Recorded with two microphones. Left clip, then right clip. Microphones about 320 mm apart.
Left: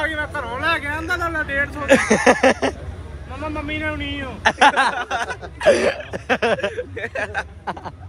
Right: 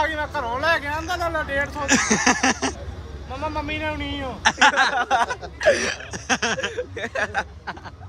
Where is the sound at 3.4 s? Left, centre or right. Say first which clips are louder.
Even; right.